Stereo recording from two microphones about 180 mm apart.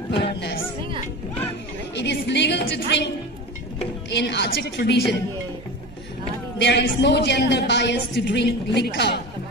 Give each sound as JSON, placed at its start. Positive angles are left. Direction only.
{"t": 0.2, "sound": "speech", "side_deg": 70}
{"t": 2.0, "sound": "a woman's voice", "side_deg": 75}
{"t": 4.1, "sound": "a woman's voice", "side_deg": 70}
{"t": 6.6, "sound": "a woman's voice", "side_deg": 75}